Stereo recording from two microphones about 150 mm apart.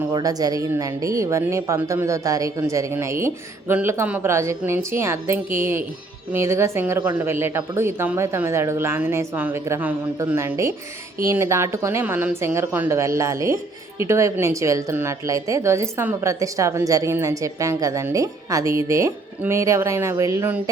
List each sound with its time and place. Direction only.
0.1 s a woman's voice: 25° right (ahead or behind)